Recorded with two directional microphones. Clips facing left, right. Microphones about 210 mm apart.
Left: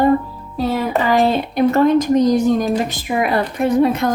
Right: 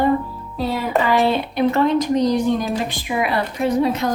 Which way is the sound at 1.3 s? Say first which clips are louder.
Left 3 dB; 45° left (ahead or behind).